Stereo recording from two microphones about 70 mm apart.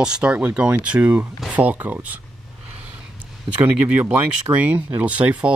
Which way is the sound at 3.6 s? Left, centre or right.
Centre.